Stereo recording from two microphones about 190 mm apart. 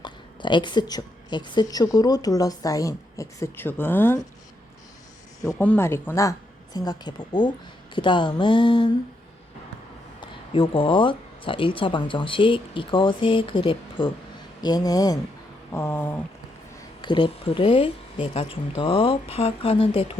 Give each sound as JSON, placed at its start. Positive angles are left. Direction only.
{"t": 0.0, "sound": "speech", "side_deg": 25}
{"t": 5.4, "sound": "speech", "side_deg": 10}
{"t": 10.2, "sound": "speech", "side_deg": 25}
{"t": 17.0, "sound": "speech", "side_deg": 25}